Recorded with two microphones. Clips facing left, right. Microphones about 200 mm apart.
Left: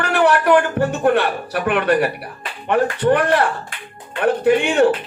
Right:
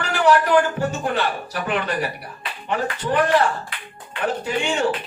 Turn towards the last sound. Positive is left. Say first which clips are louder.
# left 8 dB
turn(degrees=60)  # may be behind; listen again after turning